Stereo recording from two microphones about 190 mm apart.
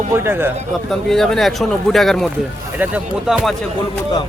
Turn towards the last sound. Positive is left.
turn(degrees=0)  # may be behind; listen again after turning